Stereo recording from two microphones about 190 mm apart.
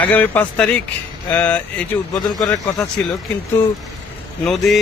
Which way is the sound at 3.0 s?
5° left (ahead or behind).